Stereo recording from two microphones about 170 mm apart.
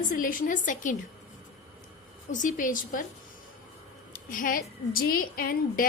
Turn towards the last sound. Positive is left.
turn(degrees=60)  # may be behind; listen again after turning